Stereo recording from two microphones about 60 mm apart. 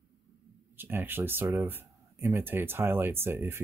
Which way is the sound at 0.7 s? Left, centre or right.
Right.